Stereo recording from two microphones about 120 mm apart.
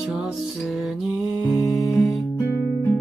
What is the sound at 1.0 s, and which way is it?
Music, 5° right (ahead or behind).